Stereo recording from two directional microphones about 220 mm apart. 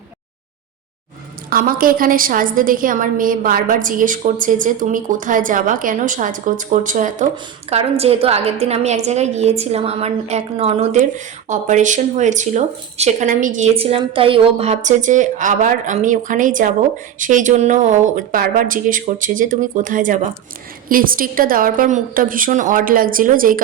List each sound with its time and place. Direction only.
1.5 s a woman's voice: 40° right (ahead or behind)